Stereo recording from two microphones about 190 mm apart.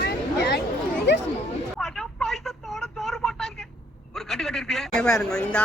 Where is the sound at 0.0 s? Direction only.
60° left (ahead or behind).